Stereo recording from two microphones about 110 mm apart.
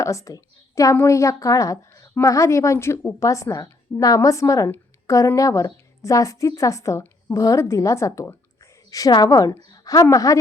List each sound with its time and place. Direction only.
0.0 s a woman's voice: 30° left (ahead or behind)